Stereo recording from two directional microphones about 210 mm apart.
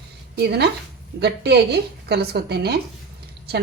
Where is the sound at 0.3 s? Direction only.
50° right (ahead or behind).